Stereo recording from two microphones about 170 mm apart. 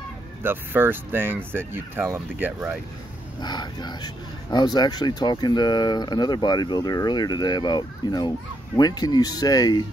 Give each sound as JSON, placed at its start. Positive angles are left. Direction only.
{"t": 0.4, "sound": "speech", "side_deg": -15}
{"t": 3.3, "sound": "speech", "side_deg": 25}